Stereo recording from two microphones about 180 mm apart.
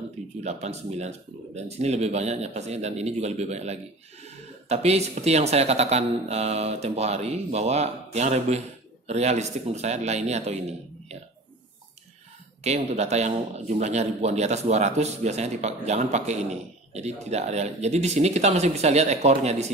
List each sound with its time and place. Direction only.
0.4 s speech: 40° right (ahead or behind)
12.6 s speech: 40° right (ahead or behind)